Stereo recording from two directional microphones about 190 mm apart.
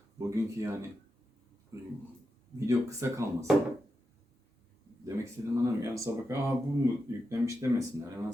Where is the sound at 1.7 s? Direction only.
15° right (ahead or behind).